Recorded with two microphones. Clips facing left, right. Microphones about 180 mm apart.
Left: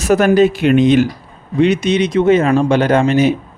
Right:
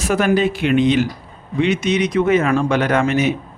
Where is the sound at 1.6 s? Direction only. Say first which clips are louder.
Left 4 dB; 35° left (ahead or behind).